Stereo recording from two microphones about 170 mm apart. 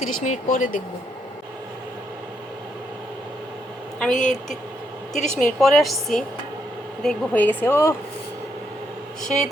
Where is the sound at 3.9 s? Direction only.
5° left (ahead or behind).